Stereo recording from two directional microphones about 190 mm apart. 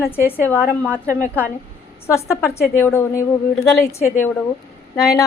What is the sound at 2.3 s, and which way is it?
Speech, 15° left (ahead or behind).